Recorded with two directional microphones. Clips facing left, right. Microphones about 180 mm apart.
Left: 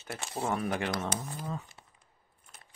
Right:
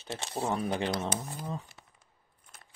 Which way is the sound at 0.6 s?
25° right (ahead or behind).